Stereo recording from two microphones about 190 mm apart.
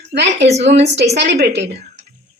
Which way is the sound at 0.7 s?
65° right (ahead or behind).